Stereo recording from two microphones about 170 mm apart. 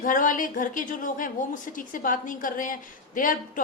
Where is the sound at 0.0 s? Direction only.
50° left (ahead or behind).